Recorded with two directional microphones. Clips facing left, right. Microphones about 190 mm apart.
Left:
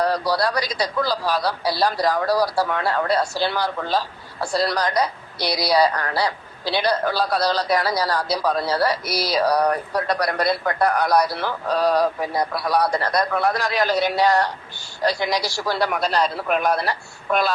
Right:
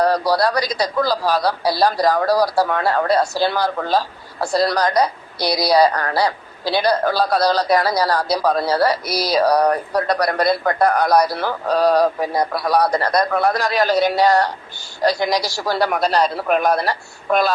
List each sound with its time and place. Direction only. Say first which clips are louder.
0.0 s a man's voice: right 4 dB; 40° right (ahead or behind)